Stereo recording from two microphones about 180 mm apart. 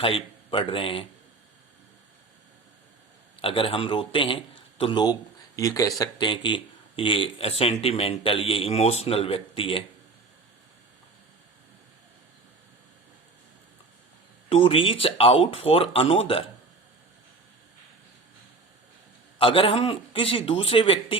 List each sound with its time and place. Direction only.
0.0 s a man's voice: 30° left (ahead or behind)
3.4 s a man's voice: 30° left (ahead or behind)
14.5 s speech: 30° left (ahead or behind)
19.4 s speech: 30° left (ahead or behind)